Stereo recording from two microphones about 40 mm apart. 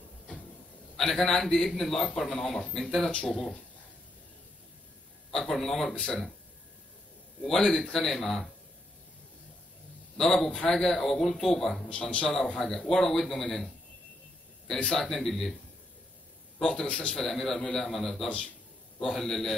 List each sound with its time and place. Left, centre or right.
0.9 s speech: centre
5.3 s speech: centre
7.4 s speech: centre
10.1 s speech: centre
11.9 s a man's voice: left
12.5 s speech: centre
14.9 s speech: centre
16.5 s a man's voice: centre
16.8 s a man's voice: left
17.2 s speech: centre